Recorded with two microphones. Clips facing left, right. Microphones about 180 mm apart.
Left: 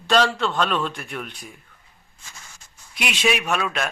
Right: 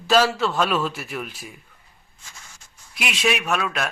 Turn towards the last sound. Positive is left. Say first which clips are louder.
# even
turn(degrees=0)  # may be behind; listen again after turning